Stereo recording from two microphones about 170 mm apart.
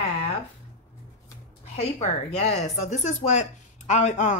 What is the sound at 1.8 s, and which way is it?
Speech, 40° left (ahead or behind).